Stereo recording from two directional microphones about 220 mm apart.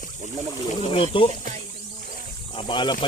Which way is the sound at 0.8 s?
25° left (ahead or behind).